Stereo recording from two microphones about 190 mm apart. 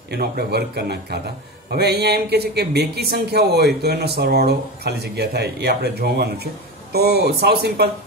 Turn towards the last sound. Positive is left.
turn(degrees=-60)  # may be behind; listen again after turning